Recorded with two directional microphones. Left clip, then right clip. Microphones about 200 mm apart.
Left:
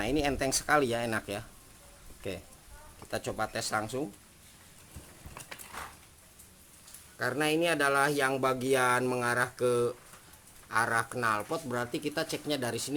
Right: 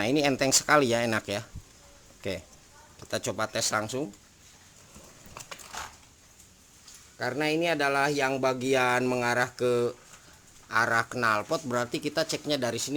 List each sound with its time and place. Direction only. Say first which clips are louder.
0.0 s speech: right 5 dB; 25° right (ahead or behind)
7.2 s speech: right 1 dB; 10° right (ahead or behind)